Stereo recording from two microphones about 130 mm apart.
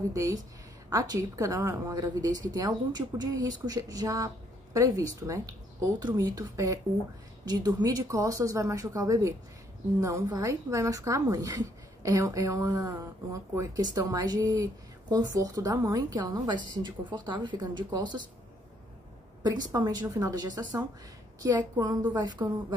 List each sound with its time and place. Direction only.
0.1 s speech: 25° right (ahead or behind)
19.4 s a woman's voice: 30° right (ahead or behind)